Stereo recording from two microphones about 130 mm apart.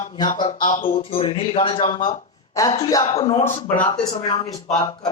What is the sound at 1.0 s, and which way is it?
Speech, 45° left (ahead or behind).